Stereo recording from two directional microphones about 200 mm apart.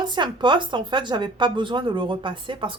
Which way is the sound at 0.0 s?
25° right (ahead or behind).